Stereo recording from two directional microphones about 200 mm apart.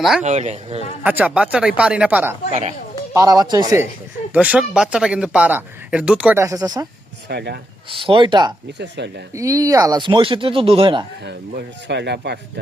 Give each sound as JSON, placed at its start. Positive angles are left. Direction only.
{"t": 0.2, "sound": "speech", "side_deg": -35}
{"t": 1.0, "sound": "speech", "side_deg": -5}
{"t": 2.5, "sound": "speech", "side_deg": -35}
{"t": 3.2, "sound": "speech", "side_deg": -20}
{"t": 4.3, "sound": "speech", "side_deg": -5}
{"t": 7.3, "sound": "speech", "side_deg": -55}
{"t": 7.9, "sound": "speech", "side_deg": -25}
{"t": 8.8, "sound": "speech", "side_deg": -60}
{"t": 9.3, "sound": "speech", "side_deg": -15}
{"t": 11.2, "sound": "speech", "side_deg": -55}